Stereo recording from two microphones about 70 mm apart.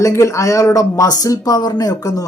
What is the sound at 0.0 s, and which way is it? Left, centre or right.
Speech, left.